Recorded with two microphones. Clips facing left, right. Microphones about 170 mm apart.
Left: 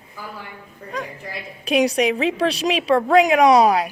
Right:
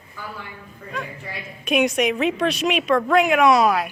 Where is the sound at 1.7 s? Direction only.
35° left (ahead or behind).